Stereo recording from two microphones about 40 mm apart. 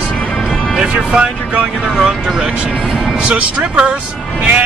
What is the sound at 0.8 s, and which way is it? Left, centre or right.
Speech, right.